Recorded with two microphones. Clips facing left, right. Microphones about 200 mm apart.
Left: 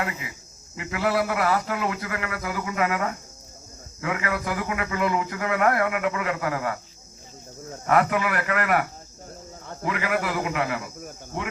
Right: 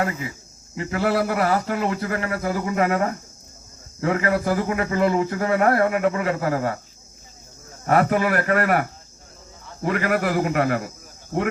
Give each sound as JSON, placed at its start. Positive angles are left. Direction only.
{"t": 0.8, "sound": "speech", "side_deg": -40}
{"t": 7.9, "sound": "a man's voice", "side_deg": -35}